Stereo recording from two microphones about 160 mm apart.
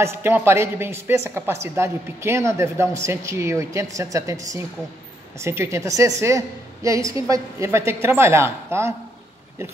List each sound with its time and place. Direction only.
0.0 s speech: 15° right (ahead or behind)